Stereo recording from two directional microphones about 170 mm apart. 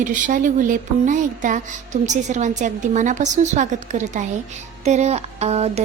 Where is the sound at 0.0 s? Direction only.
50° right (ahead or behind).